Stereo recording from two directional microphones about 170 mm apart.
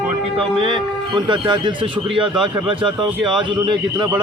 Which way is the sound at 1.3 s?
25° right (ahead or behind).